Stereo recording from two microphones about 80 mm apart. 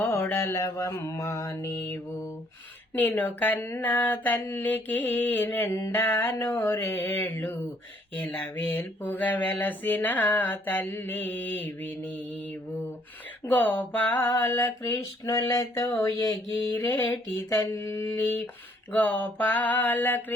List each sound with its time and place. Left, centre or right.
0.0 s mantra: left
1.7 s mantra: left
13.4 s mantra: left